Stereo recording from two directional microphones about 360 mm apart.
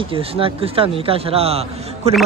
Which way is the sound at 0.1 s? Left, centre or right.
Centre.